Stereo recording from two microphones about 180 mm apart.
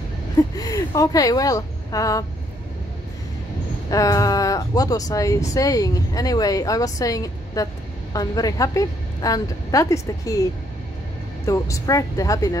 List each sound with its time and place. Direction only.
0.4 s a woman's voice: 20° left (ahead or behind)
3.9 s speech: 20° left (ahead or behind)